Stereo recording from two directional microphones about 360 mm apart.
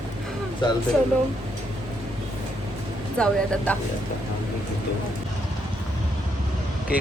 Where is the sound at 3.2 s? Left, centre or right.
Centre.